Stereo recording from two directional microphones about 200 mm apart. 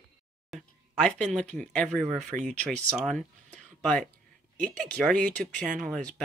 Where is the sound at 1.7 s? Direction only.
5° left (ahead or behind).